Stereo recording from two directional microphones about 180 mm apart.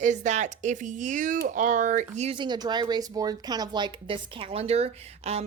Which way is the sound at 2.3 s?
25° right (ahead or behind).